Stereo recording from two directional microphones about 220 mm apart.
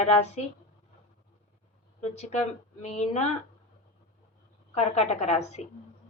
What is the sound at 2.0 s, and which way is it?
A woman's voice, 30° left (ahead or behind).